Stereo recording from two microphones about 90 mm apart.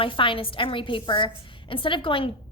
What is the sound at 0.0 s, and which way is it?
A woman's voice, 75° left (ahead or behind).